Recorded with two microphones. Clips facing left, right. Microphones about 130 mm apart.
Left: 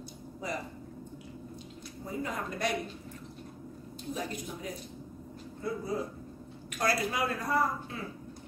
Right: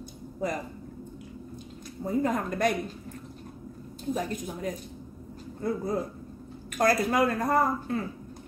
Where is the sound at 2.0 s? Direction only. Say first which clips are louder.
Right 9 dB; 45° right (ahead or behind).